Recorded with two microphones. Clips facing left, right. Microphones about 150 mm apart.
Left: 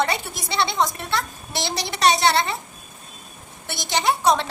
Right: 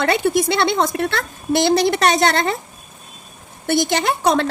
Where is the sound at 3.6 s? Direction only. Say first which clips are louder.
Right 5 dB; 55° right (ahead or behind).